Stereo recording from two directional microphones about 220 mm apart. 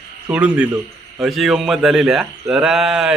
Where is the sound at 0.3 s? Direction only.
5° right (ahead or behind).